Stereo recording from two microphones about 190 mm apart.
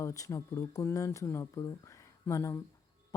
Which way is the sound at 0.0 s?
15° left (ahead or behind).